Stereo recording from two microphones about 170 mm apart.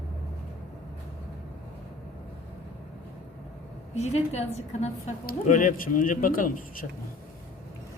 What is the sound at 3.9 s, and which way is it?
Speech, 40° left (ahead or behind).